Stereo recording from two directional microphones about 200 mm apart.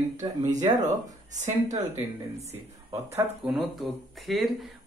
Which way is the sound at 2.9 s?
15° right (ahead or behind).